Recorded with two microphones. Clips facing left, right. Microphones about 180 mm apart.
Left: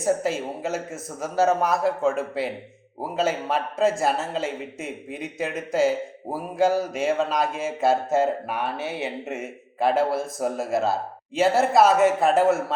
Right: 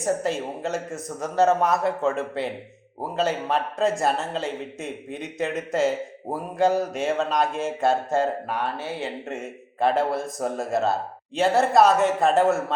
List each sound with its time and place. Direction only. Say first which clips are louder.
0.0 s speech: left 1 dB; centre (ahead or behind)